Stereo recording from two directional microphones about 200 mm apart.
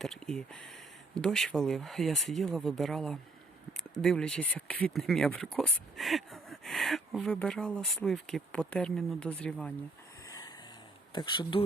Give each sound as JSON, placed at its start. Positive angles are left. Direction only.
{"t": 0.0, "sound": "speech", "side_deg": 0}
{"t": 10.2, "sound": "a sound", "side_deg": 15}
{"t": 11.1, "sound": "speech", "side_deg": 20}